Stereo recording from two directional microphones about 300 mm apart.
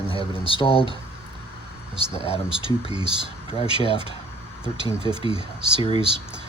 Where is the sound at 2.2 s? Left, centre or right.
Centre.